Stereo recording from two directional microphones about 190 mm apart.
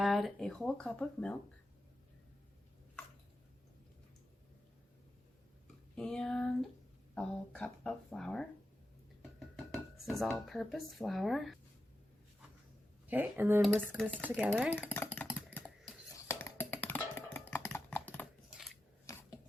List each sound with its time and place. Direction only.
0.0 s speech: centre (ahead or behind)
6.0 s speech: 5° left (ahead or behind)
9.6 s speech: centre (ahead or behind)
13.1 s speech: 10° right (ahead or behind)
13.6 s speech: 5° left (ahead or behind)
14.8 s a sound: 10° left (ahead or behind)
16.1 s computer keyboard: 15° left (ahead or behind)
18.5 s a sound: centre (ahead or behind)
19.1 s a sound: 15° left (ahead or behind)